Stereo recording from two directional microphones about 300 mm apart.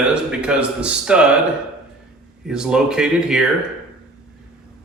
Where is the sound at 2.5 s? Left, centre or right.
Centre.